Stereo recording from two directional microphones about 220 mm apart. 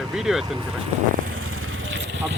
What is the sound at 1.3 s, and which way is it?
Vehicle, 70° right (ahead or behind).